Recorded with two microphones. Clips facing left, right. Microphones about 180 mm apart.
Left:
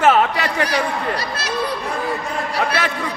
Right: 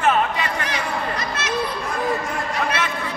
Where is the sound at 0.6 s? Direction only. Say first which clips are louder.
Left 5 dB; 35° left (ahead or behind).